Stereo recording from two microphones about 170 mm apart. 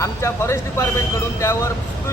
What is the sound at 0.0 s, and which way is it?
Speech, 15° left (ahead or behind).